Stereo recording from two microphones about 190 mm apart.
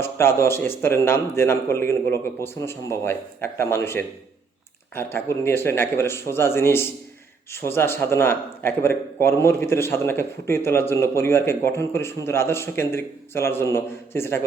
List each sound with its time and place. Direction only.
0.0 s speech: 15° left (ahead or behind)
5.1 s speech: 10° left (ahead or behind)